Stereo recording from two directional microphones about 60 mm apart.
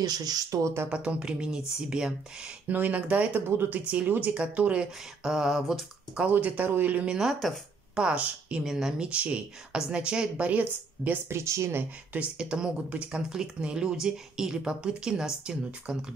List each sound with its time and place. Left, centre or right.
0.0 s speech: right
0.8 s speech: centre
2.7 s speech: right
3.4 s speech: right
4.1 s speech: right
5.2 s speech: centre
6.2 s speech: right
7.1 s speech: centre; by 11.1 s right
11.2 s speech: right
11.7 s speech: right
12.4 s speech: centre